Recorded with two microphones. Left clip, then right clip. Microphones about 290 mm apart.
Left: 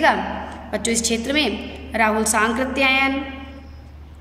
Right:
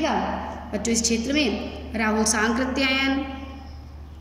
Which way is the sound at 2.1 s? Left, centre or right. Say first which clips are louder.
Left 3 dB; left.